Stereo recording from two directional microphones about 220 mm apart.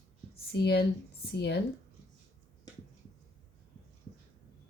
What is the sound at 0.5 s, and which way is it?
Speech, 50° left (ahead or behind).